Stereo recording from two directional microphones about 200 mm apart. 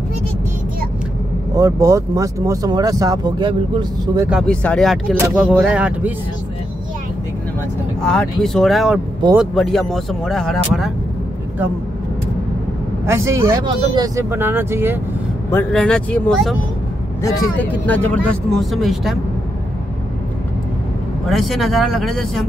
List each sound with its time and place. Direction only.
1.5 s speech: 15° right (ahead or behind)
4.3 s speech: centre (ahead or behind)
8.0 s speech: 5° left (ahead or behind)
13.0 s speech: 15° right (ahead or behind)
15.5 s speech: 5° left (ahead or behind)
21.3 s speech: centre (ahead or behind)